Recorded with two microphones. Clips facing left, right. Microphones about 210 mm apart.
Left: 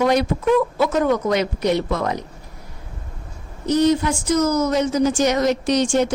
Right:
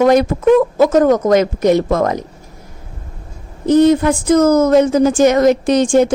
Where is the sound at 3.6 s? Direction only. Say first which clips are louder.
Right 7 dB; 55° right (ahead or behind).